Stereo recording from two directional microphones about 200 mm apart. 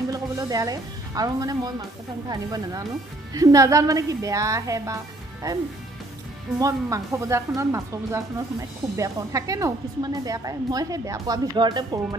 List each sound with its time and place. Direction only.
0.1 s a woman's voice: 15° right (ahead or behind)
6.6 s speech: 15° right (ahead or behind)